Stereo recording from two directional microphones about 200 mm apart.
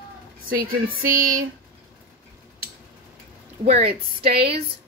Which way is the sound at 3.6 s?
30° right (ahead or behind).